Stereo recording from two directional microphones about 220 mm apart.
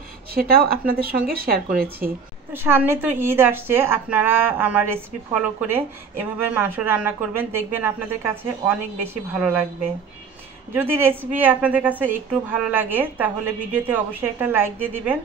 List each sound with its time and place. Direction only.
0.3 s speech: 40° right (ahead or behind)
2.5 s a woman's voice: 10° right (ahead or behind)
10.7 s a woman's voice: 10° right (ahead or behind)